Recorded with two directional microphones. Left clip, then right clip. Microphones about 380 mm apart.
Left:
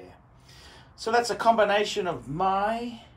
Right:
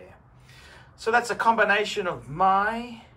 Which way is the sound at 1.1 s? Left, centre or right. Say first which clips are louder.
Even; centre.